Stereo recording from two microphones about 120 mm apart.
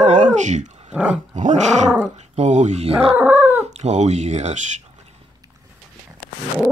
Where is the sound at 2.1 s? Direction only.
65° right (ahead or behind).